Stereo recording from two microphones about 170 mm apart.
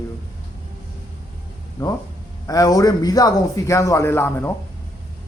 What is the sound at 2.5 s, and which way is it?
A man's voice, 20° left (ahead or behind).